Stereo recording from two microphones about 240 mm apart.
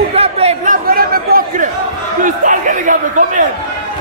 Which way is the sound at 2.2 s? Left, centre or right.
Right.